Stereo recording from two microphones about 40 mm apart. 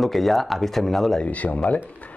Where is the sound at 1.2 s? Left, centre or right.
Left.